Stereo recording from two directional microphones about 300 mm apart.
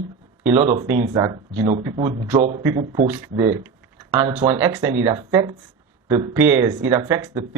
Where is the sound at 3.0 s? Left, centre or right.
Centre.